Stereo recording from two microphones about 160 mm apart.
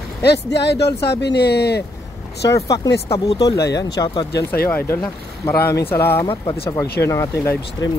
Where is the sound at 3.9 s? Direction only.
30° left (ahead or behind).